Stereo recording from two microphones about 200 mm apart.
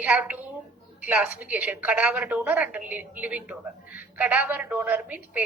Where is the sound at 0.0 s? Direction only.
5° right (ahead or behind).